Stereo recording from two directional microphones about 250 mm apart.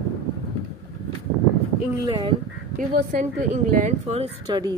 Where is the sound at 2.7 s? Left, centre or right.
Right.